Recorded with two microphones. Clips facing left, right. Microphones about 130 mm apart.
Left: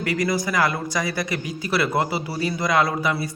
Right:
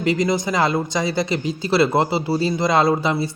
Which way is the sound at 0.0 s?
20° right (ahead or behind).